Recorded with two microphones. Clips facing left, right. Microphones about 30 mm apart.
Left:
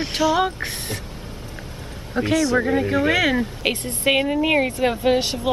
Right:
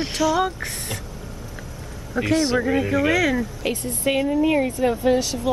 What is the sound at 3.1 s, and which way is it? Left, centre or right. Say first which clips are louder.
Speech: left 2 dB; left.